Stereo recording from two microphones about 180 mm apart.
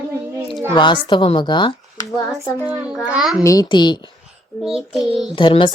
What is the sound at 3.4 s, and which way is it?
Speech, 20° left (ahead or behind).